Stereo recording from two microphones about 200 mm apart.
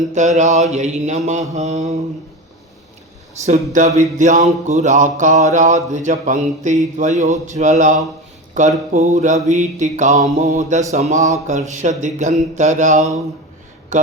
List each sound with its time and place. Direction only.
0.1 s speech: 35° right (ahead or behind)
3.4 s speech: 40° right (ahead or behind)